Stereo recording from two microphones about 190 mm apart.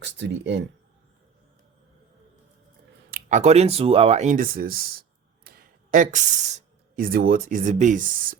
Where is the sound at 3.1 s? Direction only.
45° right (ahead or behind).